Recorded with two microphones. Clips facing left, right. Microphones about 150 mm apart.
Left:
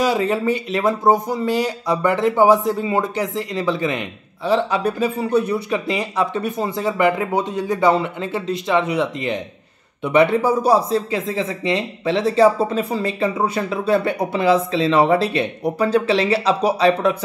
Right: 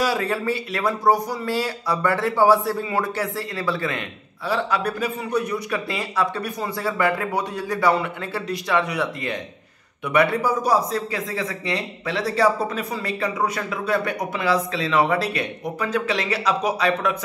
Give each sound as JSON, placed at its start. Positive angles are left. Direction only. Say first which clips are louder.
{"t": 0.0, "sound": "speech", "louder": "left 4 dB", "side_deg": 20}